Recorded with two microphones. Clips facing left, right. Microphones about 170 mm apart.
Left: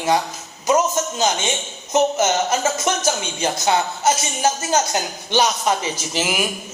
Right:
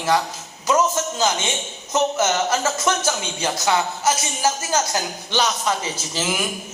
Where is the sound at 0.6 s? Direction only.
20° left (ahead or behind).